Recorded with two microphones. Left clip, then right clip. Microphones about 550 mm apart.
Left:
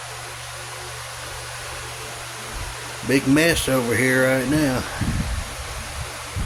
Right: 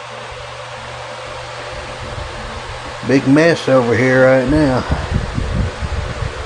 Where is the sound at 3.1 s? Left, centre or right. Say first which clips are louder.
Right 6 dB; left.